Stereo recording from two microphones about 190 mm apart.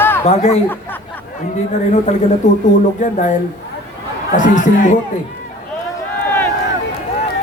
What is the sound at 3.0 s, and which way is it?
Speech, 40° left (ahead or behind).